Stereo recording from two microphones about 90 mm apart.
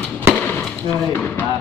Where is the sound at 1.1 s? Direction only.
20° left (ahead or behind).